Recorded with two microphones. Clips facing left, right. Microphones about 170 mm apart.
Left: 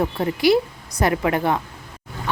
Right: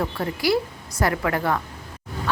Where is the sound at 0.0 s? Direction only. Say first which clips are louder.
Left 5 dB; 20° left (ahead or behind).